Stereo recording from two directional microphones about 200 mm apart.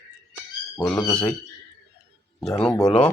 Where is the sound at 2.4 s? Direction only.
10° left (ahead or behind).